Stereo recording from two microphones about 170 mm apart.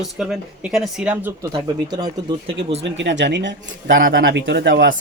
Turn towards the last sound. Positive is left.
turn(degrees=-80)